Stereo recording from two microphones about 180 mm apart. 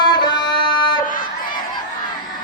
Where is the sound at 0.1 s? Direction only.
25° left (ahead or behind).